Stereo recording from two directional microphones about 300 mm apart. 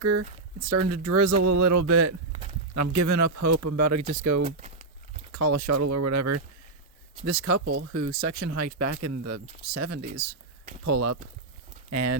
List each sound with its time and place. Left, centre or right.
0.0 s speech: right
4.4 s a sound: right
5.3 s speech: right
7.4 s speech: right
10.0 s speech: right
10.8 s speech: right